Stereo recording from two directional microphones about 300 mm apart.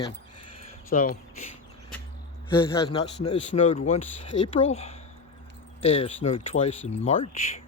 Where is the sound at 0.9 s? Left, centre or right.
Left.